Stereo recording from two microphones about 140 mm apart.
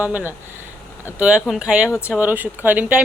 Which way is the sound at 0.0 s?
10° right (ahead or behind).